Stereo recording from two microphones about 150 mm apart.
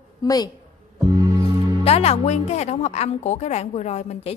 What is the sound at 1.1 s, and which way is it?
Music, 25° right (ahead or behind).